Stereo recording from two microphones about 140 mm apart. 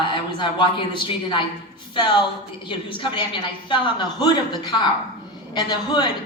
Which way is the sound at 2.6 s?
35° left (ahead or behind).